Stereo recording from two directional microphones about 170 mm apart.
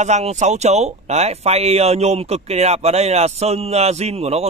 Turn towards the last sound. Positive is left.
turn(degrees=-35)  # may be behind; listen again after turning